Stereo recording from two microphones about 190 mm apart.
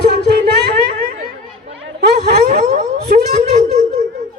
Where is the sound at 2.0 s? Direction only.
55° right (ahead or behind).